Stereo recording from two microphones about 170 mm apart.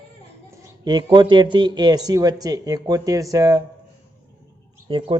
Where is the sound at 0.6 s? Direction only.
25° right (ahead or behind).